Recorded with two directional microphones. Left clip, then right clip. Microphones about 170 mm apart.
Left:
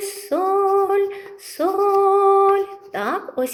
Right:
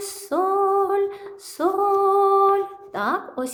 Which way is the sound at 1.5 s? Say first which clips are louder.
Left 2 dB; 5° right (ahead or behind).